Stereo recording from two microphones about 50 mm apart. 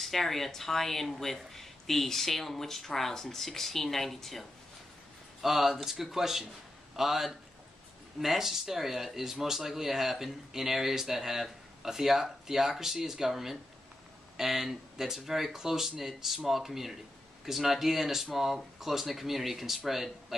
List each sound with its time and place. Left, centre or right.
0.0 s speech: centre